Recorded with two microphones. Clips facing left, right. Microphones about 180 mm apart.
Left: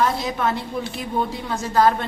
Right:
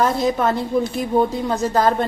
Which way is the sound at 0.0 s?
40° right (ahead or behind).